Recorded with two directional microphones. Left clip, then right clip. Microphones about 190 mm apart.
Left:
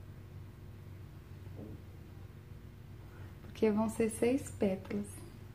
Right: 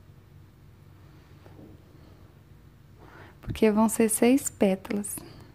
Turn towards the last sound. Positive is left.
turn(degrees=-45)  # may be behind; listen again after turning